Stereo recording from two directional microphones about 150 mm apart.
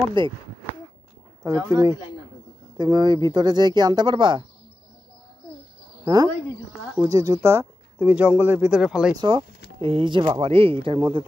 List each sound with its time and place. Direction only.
0.2 s speech: 30° right (ahead or behind)
1.4 s speech: 20° right (ahead or behind)
2.8 s speech: 30° right (ahead or behind)
7.0 s speech: 20° right (ahead or behind); by 9.1 s 5° right (ahead or behind)
9.1 s speech: 30° right (ahead or behind)